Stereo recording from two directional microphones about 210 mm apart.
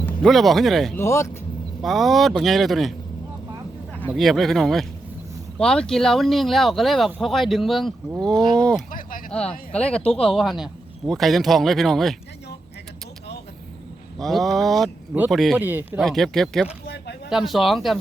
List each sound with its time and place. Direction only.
0.0 s speech: centre (ahead or behind)
1.0 s speech: 15° left (ahead or behind)
1.8 s speech: centre (ahead or behind)
4.0 s speech: centre (ahead or behind)
8.9 s a sound: 40° left (ahead or behind)
9.3 s speech: 5° left (ahead or behind)
14.2 s speech: centre (ahead or behind)
16.8 s a sound: 50° left (ahead or behind)
17.2 s speech: centre (ahead or behind)